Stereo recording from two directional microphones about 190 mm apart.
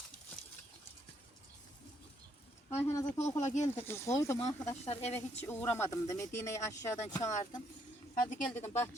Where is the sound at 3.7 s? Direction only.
15° left (ahead or behind).